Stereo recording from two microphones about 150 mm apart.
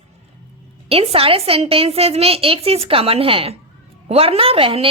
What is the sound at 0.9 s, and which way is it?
A woman's voice, 40° right (ahead or behind).